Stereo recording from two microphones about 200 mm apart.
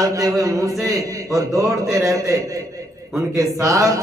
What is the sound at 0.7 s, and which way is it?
Mantra, centre (ahead or behind).